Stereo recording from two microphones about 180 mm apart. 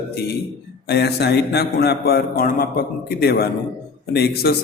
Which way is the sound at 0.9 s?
65° left (ahead or behind).